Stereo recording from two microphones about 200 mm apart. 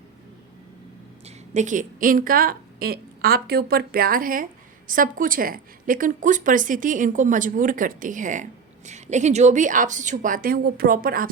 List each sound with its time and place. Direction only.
1.2 s a woman's voice: 35° right (ahead or behind)